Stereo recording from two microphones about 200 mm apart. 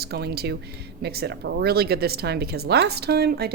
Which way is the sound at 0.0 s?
55° right (ahead or behind).